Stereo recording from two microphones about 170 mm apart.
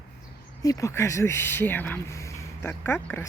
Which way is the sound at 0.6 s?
20° left (ahead or behind).